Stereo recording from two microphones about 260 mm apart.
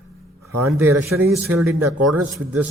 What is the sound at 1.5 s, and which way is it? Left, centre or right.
Speech, right.